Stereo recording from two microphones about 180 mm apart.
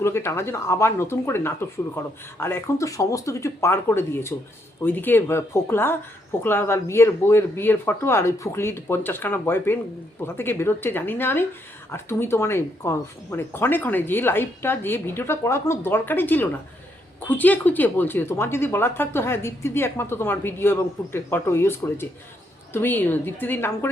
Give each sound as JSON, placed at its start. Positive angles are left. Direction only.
{"t": 0.0, "sound": "speech", "side_deg": 15}